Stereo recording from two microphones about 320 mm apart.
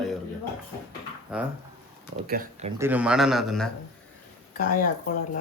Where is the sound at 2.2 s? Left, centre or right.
Right.